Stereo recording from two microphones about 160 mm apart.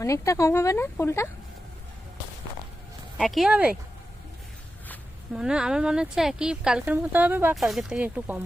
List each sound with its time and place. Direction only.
0.0 s speech: 20° left (ahead or behind)
3.2 s speech: centre (ahead or behind)
5.3 s speech: 5° right (ahead or behind)